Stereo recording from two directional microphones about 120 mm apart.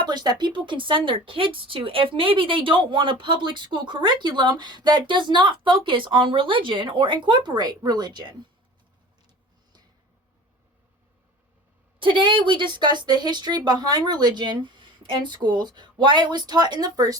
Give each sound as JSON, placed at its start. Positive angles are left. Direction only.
{"t": 0.1, "sound": "speech", "side_deg": -35}
{"t": 11.9, "sound": "speech", "side_deg": -45}